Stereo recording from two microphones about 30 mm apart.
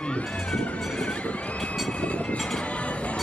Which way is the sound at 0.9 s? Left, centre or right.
Left.